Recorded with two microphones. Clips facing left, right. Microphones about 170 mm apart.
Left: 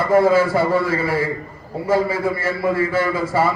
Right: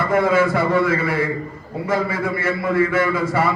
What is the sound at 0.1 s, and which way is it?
A man's voice, 30° left (ahead or behind).